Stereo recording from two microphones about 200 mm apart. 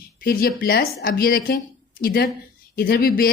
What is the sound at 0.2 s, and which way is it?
A woman's voice, 45° left (ahead or behind).